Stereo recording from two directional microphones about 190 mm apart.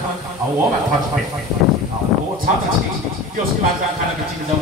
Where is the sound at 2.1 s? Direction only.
Centre (ahead or behind).